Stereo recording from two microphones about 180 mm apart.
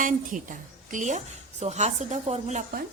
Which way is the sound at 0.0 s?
45° right (ahead or behind).